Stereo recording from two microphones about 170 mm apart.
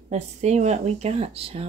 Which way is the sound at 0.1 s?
45° right (ahead or behind).